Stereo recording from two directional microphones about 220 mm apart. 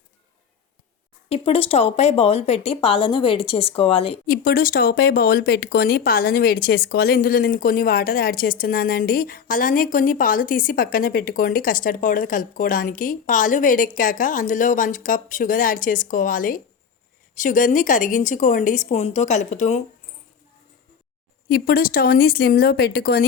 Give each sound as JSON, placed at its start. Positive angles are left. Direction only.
{"t": 1.3, "sound": "speech", "side_deg": 25}
{"t": 4.3, "sound": "speech", "side_deg": 40}
{"t": 21.5, "sound": "speech", "side_deg": 40}